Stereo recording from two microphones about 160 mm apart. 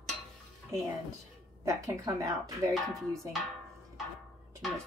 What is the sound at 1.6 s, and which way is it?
Speech, 20° right (ahead or behind).